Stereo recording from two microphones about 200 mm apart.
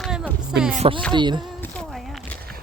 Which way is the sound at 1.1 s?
20° right (ahead or behind).